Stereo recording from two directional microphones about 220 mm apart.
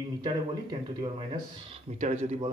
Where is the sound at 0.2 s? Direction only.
20° right (ahead or behind).